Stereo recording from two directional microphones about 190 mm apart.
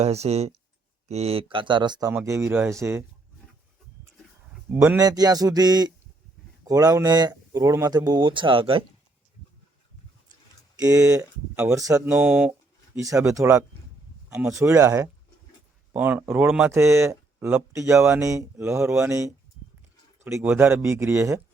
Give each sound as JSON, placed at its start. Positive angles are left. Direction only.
{"t": 0.0, "sound": "speech", "side_deg": -35}
{"t": 4.7, "sound": "speech", "side_deg": -10}
{"t": 10.9, "sound": "speech", "side_deg": -5}
{"t": 12.0, "sound": "speech", "side_deg": -5}